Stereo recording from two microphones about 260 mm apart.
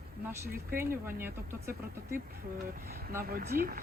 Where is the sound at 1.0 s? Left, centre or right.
Centre.